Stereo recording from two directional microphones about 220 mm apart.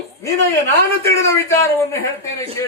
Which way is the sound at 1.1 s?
15° left (ahead or behind).